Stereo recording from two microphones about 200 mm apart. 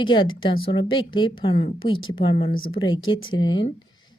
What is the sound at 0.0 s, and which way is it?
A woman's voice, 25° left (ahead or behind).